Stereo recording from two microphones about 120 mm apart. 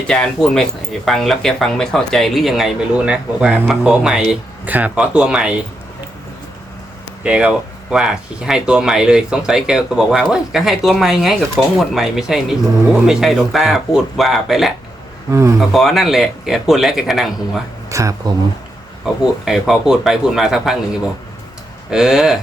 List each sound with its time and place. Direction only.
0.1 s speech: 5° left (ahead or behind)
7.3 s speech: 10° right (ahead or behind)
15.3 s speech: 25° right (ahead or behind)
15.5 s speech: centre (ahead or behind)
17.8 s speech: 25° right (ahead or behind)
19.0 s speech: 5° right (ahead or behind)
21.8 s speech: 5° right (ahead or behind)